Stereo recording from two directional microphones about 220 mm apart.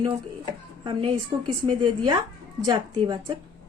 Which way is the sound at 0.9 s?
20° right (ahead or behind).